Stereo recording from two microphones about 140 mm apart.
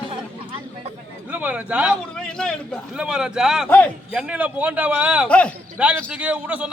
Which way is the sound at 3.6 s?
10° left (ahead or behind).